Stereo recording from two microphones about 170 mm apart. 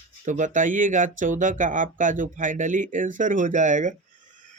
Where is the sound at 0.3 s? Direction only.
50° right (ahead or behind).